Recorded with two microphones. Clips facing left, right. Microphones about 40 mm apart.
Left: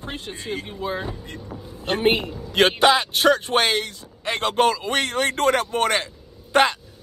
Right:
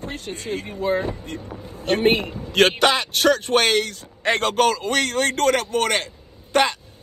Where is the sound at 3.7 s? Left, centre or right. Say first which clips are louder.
Right 4 dB; right.